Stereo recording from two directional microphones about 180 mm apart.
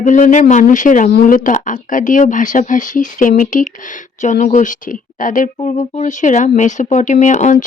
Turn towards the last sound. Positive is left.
turn(degrees=45)  # may be behind; listen again after turning